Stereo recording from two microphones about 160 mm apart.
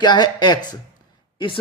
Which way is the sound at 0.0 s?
25° left (ahead or behind).